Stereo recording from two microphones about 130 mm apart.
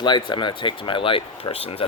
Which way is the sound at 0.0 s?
35° left (ahead or behind).